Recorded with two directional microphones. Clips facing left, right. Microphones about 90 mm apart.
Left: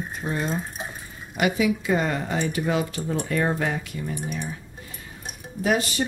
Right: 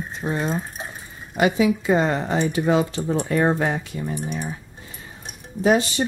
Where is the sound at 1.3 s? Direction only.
30° right (ahead or behind).